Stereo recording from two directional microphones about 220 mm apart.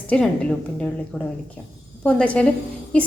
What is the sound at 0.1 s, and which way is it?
A woman's voice, 5° left (ahead or behind).